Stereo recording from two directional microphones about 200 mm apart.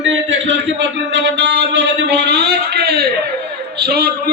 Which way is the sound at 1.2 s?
60° right (ahead or behind).